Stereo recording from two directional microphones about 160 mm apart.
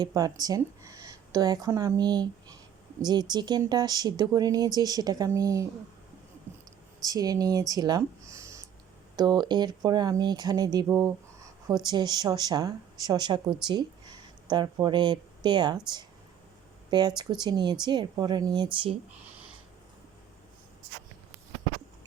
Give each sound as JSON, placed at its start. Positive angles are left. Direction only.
{"t": 0.0, "sound": "speech", "side_deg": -25}
{"t": 7.0, "sound": "speech", "side_deg": -25}